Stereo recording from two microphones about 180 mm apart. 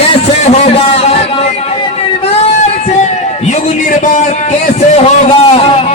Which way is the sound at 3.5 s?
45° left (ahead or behind).